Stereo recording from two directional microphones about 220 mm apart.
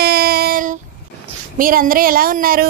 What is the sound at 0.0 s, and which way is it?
Child singing, 45° right (ahead or behind).